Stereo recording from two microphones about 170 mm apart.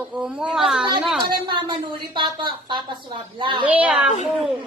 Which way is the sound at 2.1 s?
30° right (ahead or behind).